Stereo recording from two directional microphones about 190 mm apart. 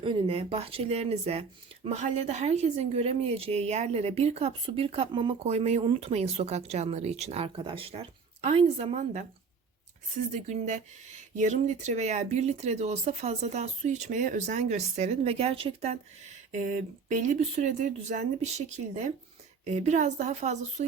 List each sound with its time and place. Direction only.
0.0 s speech: 25° right (ahead or behind)
10.3 s speech: 40° right (ahead or behind)
16.5 s speech: 40° right (ahead or behind)